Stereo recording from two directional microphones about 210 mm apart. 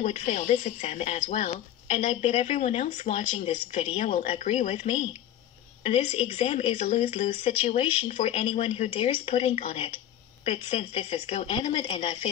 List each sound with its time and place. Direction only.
0.0 s speech: 35° left (ahead or behind)